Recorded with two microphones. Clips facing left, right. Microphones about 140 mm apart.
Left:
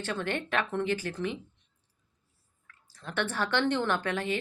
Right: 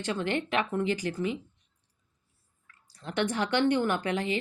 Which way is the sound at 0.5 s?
10° right (ahead or behind).